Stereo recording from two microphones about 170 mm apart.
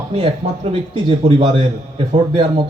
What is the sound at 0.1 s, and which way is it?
A man's voice, 35° right (ahead or behind).